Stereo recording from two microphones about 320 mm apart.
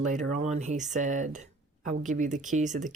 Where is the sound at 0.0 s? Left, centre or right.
Right.